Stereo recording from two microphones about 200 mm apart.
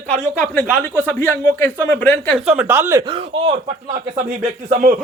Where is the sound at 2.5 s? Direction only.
10° right (ahead or behind).